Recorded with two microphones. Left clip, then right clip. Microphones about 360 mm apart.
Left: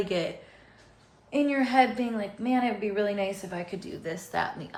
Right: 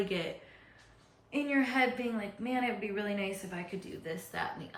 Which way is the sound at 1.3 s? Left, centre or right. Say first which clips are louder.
Left 6 dB; centre.